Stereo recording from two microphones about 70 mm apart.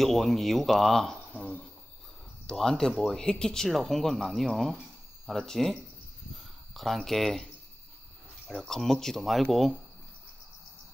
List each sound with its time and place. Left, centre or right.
0.0 s speech: centre
1.3 s a sound: centre
2.4 s speech: centre
6.3 s cricket: centre
7.1 s speech: centre
8.5 s speech: centre